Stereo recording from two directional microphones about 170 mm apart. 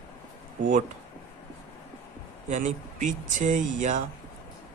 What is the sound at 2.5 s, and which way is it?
Speech, 45° right (ahead or behind).